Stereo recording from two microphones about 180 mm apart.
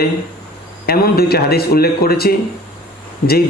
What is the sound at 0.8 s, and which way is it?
A man's voice, 60° left (ahead or behind).